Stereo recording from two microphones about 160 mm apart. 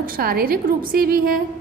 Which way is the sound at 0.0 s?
65° right (ahead or behind).